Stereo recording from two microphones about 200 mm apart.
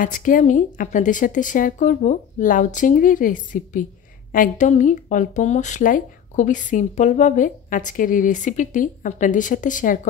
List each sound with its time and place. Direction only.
0.0 s speech: 40° left (ahead or behind)